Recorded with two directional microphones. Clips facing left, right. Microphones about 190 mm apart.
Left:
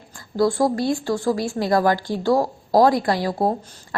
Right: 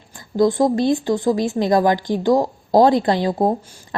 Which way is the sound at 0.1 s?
20° right (ahead or behind).